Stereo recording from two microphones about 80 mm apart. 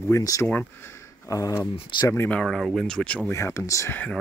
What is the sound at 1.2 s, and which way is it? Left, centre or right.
Speech, left.